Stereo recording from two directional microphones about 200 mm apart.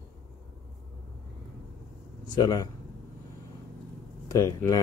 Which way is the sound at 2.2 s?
20° left (ahead or behind).